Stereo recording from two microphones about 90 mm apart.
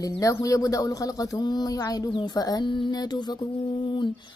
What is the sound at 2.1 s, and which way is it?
Female singing, 55° left (ahead or behind).